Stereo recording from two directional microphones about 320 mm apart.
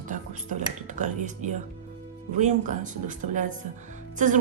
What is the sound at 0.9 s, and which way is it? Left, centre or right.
A woman's voice, right.